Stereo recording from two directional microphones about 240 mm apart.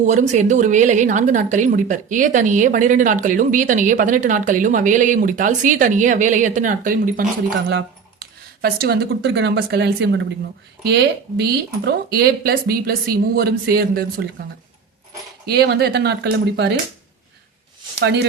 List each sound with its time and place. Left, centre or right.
0.0 s a woman's voice: right
8.6 s a woman's voice: right
15.4 s speech: right
18.0 s speech: right